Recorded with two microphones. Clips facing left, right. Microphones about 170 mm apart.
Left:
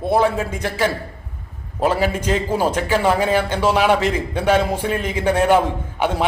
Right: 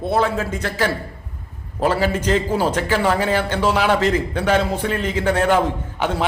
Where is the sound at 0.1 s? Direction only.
15° left (ahead or behind).